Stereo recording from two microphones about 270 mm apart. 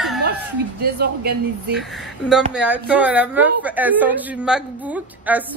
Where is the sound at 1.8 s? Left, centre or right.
Centre.